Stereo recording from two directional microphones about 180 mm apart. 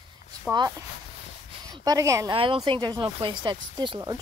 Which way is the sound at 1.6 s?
20° right (ahead or behind).